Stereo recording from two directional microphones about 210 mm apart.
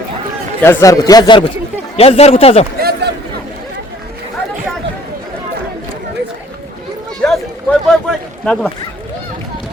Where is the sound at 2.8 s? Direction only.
50° right (ahead or behind).